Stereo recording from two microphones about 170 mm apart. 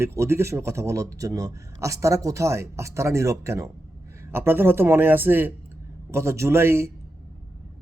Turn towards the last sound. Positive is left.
turn(degrees=-15)  # may be behind; listen again after turning